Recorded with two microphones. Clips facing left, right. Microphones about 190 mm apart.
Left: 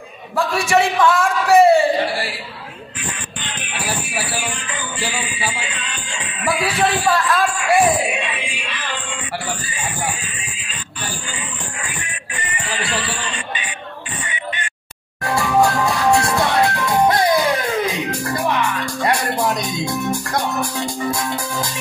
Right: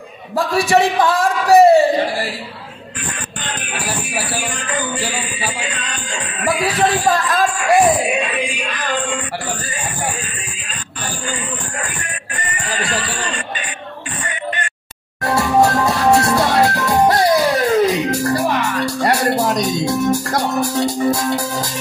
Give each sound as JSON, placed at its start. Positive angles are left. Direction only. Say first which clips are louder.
{"t": 0.5, "sound": "a man's voice", "louder": "right 3 dB", "side_deg": -35}
{"t": 3.4, "sound": "music", "louder": "right 1 dB", "side_deg": -40}
{"t": 11.8, "sound": "music", "louder": "right 3 dB", "side_deg": -40}
{"t": 14.2, "sound": "a sound", "louder": "right 5 dB", "side_deg": -40}
{"t": 15.2, "sound": "music", "louder": "right 2 dB", "side_deg": -40}